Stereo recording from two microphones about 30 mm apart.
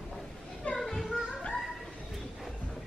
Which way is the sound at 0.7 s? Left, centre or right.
Left.